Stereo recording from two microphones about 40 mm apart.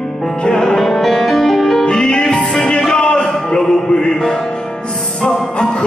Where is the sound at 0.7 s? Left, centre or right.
Centre.